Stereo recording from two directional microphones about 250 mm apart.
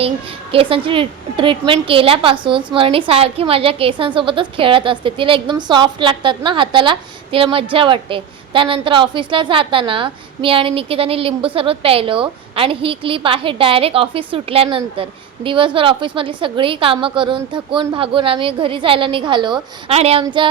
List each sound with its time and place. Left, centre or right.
0.5 s a woman's voice: right